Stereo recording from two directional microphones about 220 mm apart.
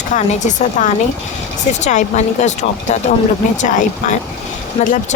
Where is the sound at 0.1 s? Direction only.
35° left (ahead or behind).